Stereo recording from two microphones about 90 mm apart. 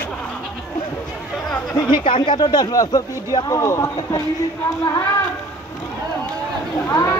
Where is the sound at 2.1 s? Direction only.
65° left (ahead or behind); by 4.2 s 30° left (ahead or behind).